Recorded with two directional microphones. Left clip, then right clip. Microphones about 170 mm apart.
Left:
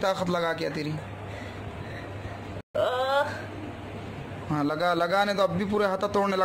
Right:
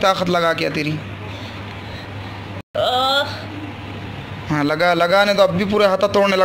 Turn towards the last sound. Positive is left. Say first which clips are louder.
# right 10 dB
turn(degrees=10)  # may be behind; listen again after turning